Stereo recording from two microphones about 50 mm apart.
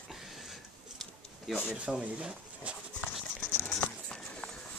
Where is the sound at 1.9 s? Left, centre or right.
Right.